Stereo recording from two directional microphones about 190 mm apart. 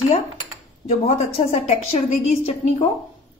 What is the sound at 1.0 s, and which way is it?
Speech, 35° left (ahead or behind).